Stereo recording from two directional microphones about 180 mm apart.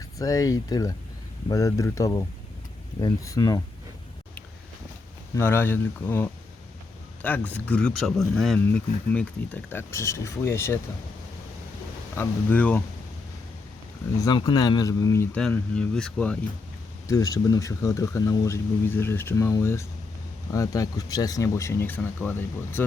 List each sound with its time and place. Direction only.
0.2 s speech: 20° left (ahead or behind)
5.4 s speech: 15° left (ahead or behind)
12.1 s speech: 10° left (ahead or behind)
14.3 s speech: 20° left (ahead or behind)
15.4 s speech: 5° left (ahead or behind)
17.1 s speech: 20° left (ahead or behind)